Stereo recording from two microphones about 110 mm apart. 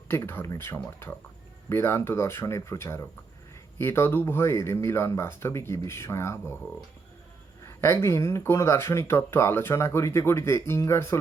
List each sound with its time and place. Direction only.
0.1 s speech: 20° left (ahead or behind)
7.6 s speech: 25° left (ahead or behind)